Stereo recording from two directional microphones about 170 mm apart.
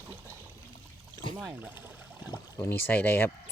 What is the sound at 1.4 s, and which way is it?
Speech, centre (ahead or behind).